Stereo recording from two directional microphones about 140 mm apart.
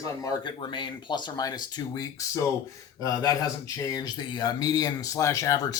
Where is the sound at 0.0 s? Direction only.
25° left (ahead or behind).